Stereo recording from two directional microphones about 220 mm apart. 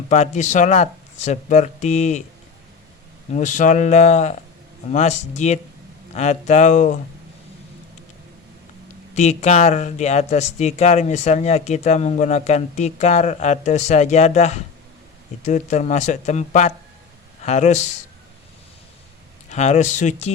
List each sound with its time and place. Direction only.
0.1 s speech: 35° left (ahead or behind)
3.3 s speech: 35° left (ahead or behind)
9.1 s speech: 30° left (ahead or behind)
19.5 s speech: 30° left (ahead or behind)